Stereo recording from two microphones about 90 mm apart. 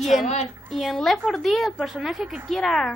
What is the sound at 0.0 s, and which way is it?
A woman's voice, centre (ahead or behind).